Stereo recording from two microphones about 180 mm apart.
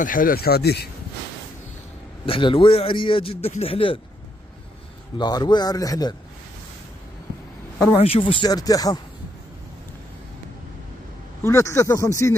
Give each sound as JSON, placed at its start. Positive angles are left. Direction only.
{"t": 0.0, "sound": "speech", "side_deg": 50}
{"t": 2.2, "sound": "a man's voice", "side_deg": 30}
{"t": 5.1, "sound": "a man's voice", "side_deg": 25}
{"t": 8.0, "sound": "a man's voice", "side_deg": 30}
{"t": 11.4, "sound": "speech", "side_deg": 15}